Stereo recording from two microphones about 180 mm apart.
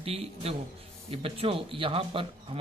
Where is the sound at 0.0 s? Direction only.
30° right (ahead or behind).